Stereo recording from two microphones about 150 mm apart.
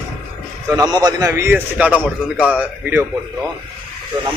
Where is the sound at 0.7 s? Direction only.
25° right (ahead or behind).